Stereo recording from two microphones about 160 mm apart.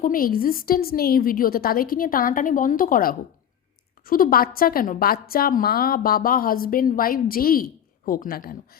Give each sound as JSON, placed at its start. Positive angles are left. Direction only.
{"t": 0.0, "sound": "a woman's voice", "side_deg": 60}